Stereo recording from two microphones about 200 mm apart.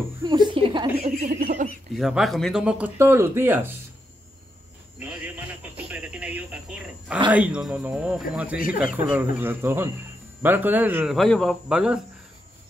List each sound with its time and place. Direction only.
0.2 s a sound: 20° right (ahead or behind)
1.2 s a sound: 40° right (ahead or behind)
2.0 s speech: centre (ahead or behind)
5.0 s radio: 10° right (ahead or behind)
7.2 s speech: 5° right (ahead or behind)
11.1 s speech: centre (ahead or behind)